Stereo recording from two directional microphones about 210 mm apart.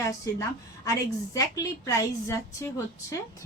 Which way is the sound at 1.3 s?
15° left (ahead or behind).